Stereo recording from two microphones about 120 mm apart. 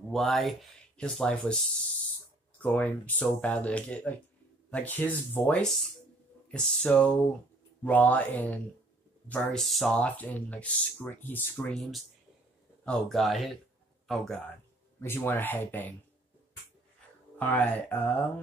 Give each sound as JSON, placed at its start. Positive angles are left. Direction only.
{"t": 0.1, "sound": "speech", "side_deg": 0}
{"t": 2.6, "sound": "speech", "side_deg": 15}
{"t": 9.3, "sound": "speech", "side_deg": 5}
{"t": 12.8, "sound": "a man's voice", "side_deg": 5}
{"t": 15.0, "sound": "speech", "side_deg": 20}
{"t": 17.4, "sound": "speech", "side_deg": 15}